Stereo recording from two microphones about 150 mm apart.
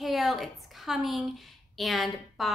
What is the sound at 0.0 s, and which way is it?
A woman's voice, centre (ahead or behind).